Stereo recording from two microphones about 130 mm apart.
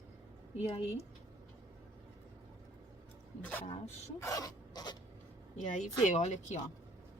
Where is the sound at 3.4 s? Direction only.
15° left (ahead or behind).